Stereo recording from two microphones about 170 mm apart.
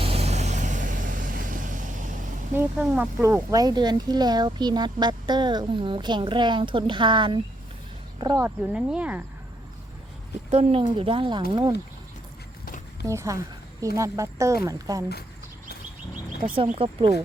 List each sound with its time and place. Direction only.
0.0 s vehicle: 35° right (ahead or behind)
2.6 s speech: 10° right (ahead or behind); by 8.4 s 25° right (ahead or behind)
8.4 s speech: 10° right (ahead or behind)
10.5 s speech: 35° right (ahead or behind)
13.1 s speech: 20° right (ahead or behind)
16.6 s speech: 35° right (ahead or behind)